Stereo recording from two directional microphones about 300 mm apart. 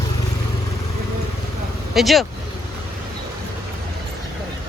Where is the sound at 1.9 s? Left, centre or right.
Centre.